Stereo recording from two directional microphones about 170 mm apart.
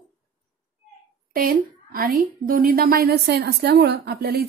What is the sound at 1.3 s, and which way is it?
A woman's voice, 55° right (ahead or behind).